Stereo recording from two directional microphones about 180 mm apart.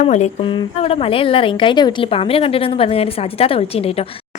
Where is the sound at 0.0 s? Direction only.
40° left (ahead or behind).